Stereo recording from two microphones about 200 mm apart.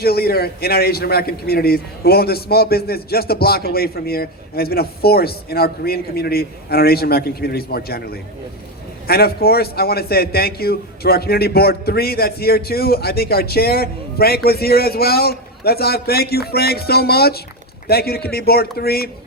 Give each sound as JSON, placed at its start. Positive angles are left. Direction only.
{"t": 0.0, "sound": "a man's voice", "side_deg": 50}